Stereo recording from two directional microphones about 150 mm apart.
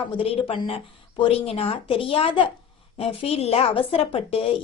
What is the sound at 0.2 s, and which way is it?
A woman's voice, 35° left (ahead or behind).